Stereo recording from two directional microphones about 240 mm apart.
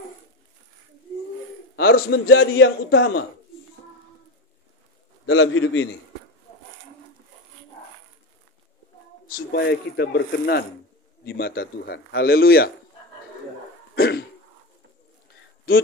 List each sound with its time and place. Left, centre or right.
1.8 s a man's voice: left
5.2 s a man's voice: left
9.3 s a man's voice: left
13.9 s cough: left
15.7 s a man's voice: left